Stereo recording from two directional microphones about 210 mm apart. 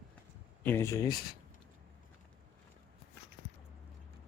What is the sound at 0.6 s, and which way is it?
Speech, 10° left (ahead or behind).